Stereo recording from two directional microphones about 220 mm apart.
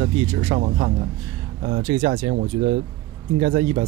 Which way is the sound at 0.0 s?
35° right (ahead or behind).